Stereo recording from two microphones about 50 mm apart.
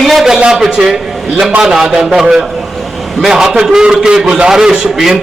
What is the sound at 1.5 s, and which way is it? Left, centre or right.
Speech, right.